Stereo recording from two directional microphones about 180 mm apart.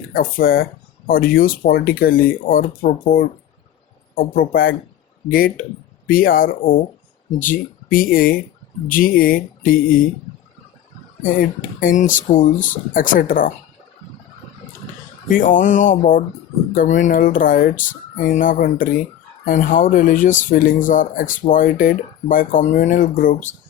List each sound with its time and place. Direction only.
0.1 s speech: 55° left (ahead or behind)
6.1 s speech: 50° left (ahead or behind)
11.2 s speech: 50° left (ahead or behind)
15.3 s speech: 45° left (ahead or behind)